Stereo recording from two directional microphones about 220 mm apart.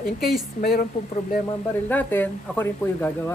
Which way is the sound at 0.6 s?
40° left (ahead or behind).